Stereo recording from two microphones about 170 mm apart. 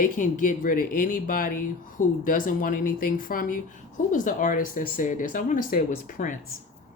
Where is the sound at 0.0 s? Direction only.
50° left (ahead or behind).